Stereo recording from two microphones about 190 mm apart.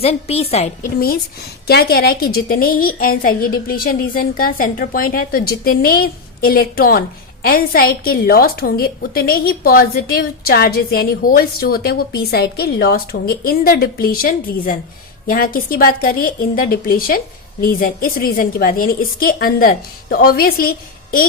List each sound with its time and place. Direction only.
0.0 s a woman's voice: 30° left (ahead or behind)
0.9 s a woman's voice: 55° left (ahead or behind)